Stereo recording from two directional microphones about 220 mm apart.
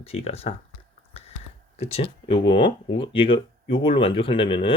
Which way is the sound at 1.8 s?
25° left (ahead or behind).